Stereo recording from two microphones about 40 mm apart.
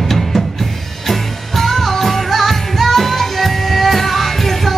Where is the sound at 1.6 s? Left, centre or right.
Centre.